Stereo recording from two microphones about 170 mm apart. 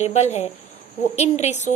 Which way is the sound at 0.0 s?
40° left (ahead or behind).